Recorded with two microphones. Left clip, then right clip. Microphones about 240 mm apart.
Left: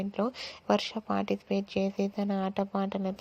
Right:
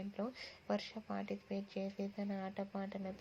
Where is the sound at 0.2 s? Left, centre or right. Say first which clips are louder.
Left 12 dB; left.